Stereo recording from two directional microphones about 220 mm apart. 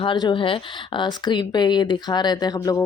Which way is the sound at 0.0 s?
20° left (ahead or behind).